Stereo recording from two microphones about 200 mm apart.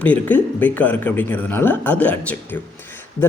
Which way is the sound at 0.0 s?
5° left (ahead or behind).